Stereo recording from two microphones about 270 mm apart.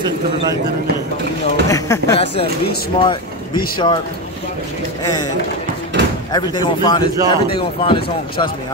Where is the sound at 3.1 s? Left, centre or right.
Centre.